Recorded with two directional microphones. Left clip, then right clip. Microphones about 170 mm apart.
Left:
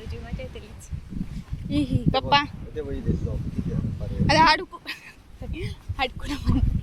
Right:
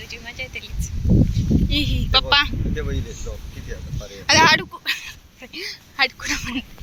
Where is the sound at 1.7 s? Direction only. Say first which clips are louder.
Right 3 dB; 30° left (ahead or behind).